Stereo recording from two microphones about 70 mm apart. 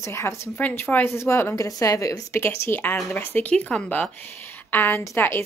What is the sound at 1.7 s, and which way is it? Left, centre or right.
Speech, left.